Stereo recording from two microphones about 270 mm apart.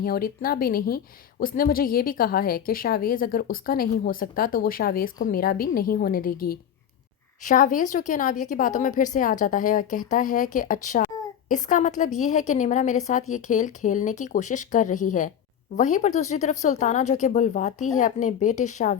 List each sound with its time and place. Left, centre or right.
0.0 s a woman's voice: left